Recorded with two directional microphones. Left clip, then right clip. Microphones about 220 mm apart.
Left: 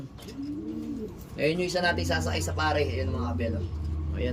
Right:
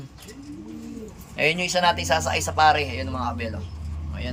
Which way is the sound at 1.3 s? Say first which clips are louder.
Right 5 dB; centre (ahead or behind).